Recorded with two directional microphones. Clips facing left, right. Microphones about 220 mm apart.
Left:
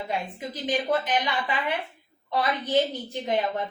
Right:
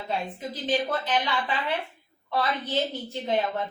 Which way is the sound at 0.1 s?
15° left (ahead or behind).